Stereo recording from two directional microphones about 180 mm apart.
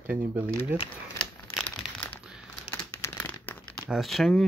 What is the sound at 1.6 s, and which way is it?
Crumpling, 5° left (ahead or behind).